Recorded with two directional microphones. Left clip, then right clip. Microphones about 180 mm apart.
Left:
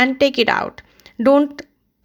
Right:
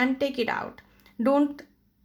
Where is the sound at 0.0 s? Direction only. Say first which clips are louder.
Left 11 dB; 35° left (ahead or behind).